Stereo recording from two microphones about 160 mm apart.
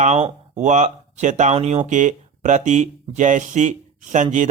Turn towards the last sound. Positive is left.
turn(degrees=-50)  # may be behind; listen again after turning